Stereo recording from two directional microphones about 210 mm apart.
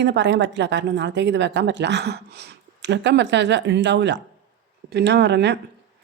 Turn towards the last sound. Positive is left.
turn(degrees=-55)  # may be behind; listen again after turning